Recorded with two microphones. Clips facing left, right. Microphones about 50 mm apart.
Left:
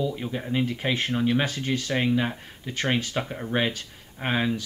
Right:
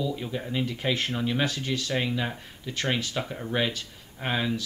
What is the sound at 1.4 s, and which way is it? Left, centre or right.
Speech, left.